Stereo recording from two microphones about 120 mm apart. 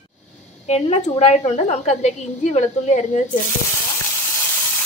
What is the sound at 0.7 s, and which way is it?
A woman's voice, 70° left (ahead or behind).